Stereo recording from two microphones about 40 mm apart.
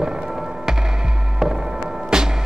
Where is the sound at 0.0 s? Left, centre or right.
Centre.